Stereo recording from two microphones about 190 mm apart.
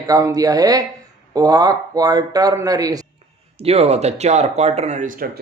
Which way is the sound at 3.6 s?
30° right (ahead or behind).